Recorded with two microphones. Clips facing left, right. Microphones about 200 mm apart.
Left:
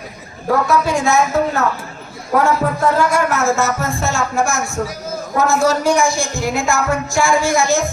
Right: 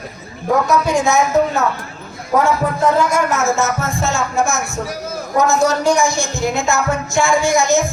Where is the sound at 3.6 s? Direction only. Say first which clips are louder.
Even; 20° right (ahead or behind).